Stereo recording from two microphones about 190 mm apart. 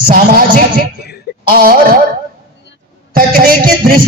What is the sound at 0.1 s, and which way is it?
A man's voice, 50° right (ahead or behind).